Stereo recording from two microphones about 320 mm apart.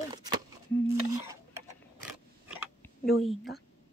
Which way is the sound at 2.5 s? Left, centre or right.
Centre.